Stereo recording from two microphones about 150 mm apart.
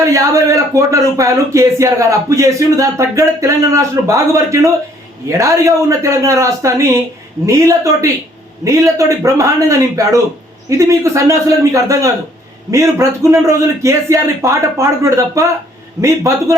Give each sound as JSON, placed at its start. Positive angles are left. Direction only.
{"t": 0.0, "sound": "speech", "side_deg": -20}